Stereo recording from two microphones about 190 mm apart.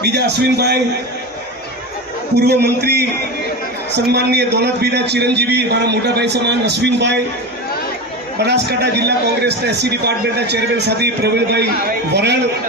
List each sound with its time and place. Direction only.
0.0 s a man's voice: 60° right (ahead or behind)
2.3 s a man's voice: 60° right (ahead or behind)
8.4 s a man's voice: 60° right (ahead or behind)